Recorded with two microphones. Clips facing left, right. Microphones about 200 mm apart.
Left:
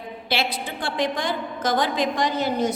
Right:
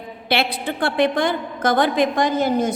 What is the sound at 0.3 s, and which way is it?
A woman's voice, 60° right (ahead or behind).